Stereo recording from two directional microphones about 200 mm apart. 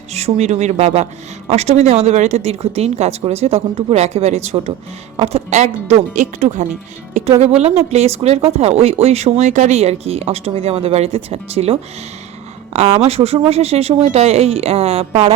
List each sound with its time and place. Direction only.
0.1 s speech: 35° right (ahead or behind)